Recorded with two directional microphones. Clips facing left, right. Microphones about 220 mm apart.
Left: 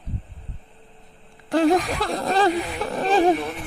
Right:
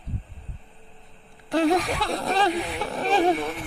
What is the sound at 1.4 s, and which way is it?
Speech, centre (ahead or behind).